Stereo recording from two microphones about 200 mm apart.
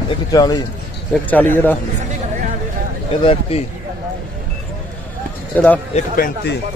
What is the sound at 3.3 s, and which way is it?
Speech, 30° left (ahead or behind).